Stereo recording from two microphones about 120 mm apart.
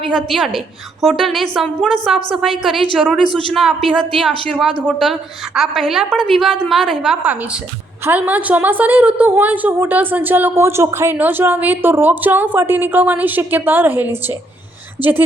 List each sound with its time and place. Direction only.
0.0 s a woman's voice: centre (ahead or behind)